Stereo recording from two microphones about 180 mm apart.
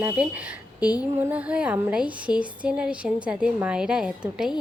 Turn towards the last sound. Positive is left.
turn(degrees=-5)  # may be behind; listen again after turning